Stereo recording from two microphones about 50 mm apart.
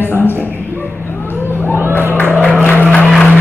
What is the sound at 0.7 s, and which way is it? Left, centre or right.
Bow-wow, left.